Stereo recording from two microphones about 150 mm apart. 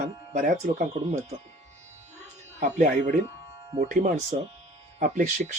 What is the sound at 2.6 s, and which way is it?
Speech, 55° right (ahead or behind).